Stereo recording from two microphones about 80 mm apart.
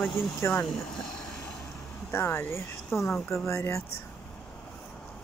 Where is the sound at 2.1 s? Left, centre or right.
Left.